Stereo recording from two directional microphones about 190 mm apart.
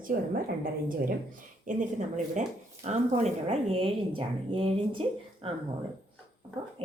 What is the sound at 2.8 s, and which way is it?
Speech, 35° right (ahead or behind).